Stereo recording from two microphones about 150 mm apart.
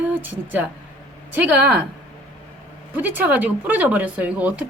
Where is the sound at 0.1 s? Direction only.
10° right (ahead or behind).